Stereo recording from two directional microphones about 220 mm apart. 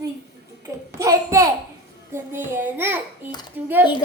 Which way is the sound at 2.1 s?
10° right (ahead or behind).